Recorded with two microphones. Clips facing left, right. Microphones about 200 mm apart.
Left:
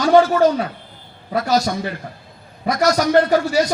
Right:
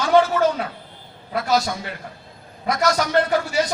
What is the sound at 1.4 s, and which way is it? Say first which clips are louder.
Speech: left 3 dB; 40° left (ahead or behind).